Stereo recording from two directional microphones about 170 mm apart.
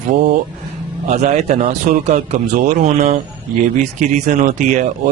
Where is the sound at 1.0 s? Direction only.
40° right (ahead or behind).